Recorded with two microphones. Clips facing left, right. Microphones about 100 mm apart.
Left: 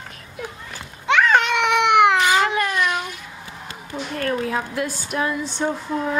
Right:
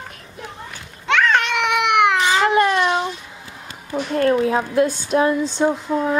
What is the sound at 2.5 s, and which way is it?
Cat, 30° right (ahead or behind).